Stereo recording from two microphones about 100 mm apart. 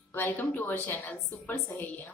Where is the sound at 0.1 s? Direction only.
20° left (ahead or behind).